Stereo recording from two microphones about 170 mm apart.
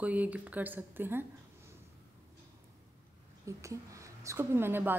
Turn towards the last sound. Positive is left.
turn(degrees=-15)  # may be behind; listen again after turning